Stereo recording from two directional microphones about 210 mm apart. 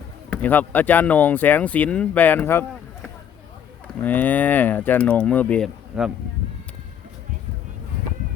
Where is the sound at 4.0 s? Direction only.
10° left (ahead or behind).